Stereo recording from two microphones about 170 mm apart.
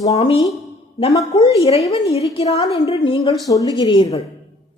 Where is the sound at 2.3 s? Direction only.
35° left (ahead or behind).